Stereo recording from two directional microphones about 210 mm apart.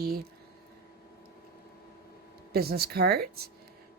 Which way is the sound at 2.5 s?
50° right (ahead or behind).